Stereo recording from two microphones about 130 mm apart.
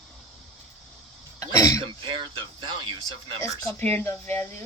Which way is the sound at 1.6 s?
25° left (ahead or behind).